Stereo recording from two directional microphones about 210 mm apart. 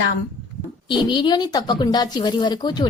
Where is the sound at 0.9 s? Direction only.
20° left (ahead or behind).